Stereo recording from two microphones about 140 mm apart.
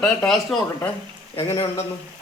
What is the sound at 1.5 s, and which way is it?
Speech, 25° left (ahead or behind).